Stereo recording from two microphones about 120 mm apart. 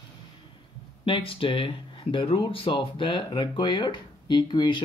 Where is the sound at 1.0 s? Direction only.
45° left (ahead or behind).